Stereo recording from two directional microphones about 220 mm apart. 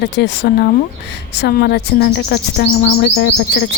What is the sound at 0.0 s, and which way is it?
Speech, 50° left (ahead or behind).